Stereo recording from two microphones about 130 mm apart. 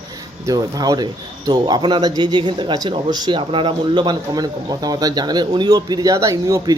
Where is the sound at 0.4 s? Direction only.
30° right (ahead or behind).